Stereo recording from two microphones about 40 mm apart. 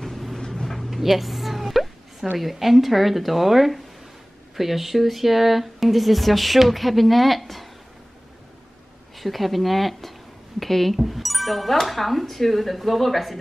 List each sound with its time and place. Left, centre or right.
0.0 s vehicle: centre
0.8 s music: centre
2.3 s speech: centre
9.1 s speech: centre